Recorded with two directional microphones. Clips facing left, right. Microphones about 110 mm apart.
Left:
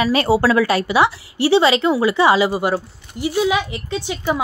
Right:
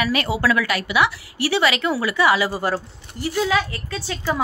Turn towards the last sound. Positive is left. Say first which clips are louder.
# left 4 dB
turn(degrees=20)  # may be behind; listen again after turning